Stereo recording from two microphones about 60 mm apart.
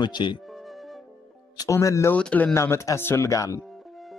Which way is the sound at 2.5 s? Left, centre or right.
Left.